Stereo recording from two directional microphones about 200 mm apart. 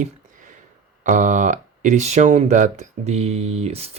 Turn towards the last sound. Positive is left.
turn(degrees=-30)  # may be behind; listen again after turning